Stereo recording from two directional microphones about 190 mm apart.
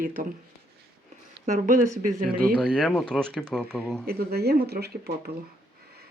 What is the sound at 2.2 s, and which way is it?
Speech, 5° right (ahead or behind).